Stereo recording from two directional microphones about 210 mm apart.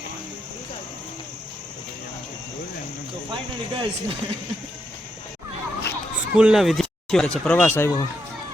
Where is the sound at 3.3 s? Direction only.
25° right (ahead or behind).